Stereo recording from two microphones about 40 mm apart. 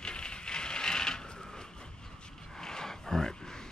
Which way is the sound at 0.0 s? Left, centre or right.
Left.